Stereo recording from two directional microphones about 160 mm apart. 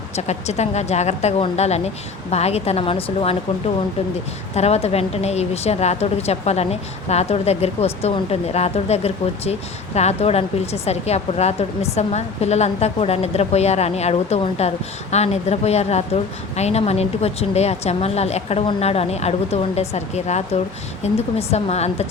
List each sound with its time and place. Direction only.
0.2 s a woman's voice: 45° left (ahead or behind)
4.5 s a woman's voice: 40° left (ahead or behind)